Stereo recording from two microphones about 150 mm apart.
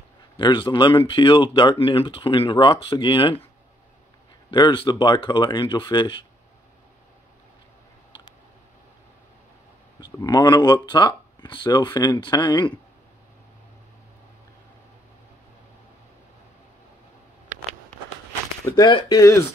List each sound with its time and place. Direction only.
0.4 s speech: 30° left (ahead or behind)
4.5 s speech: 35° left (ahead or behind)
9.9 s speech: 25° left (ahead or behind)
18.7 s speech: 30° left (ahead or behind)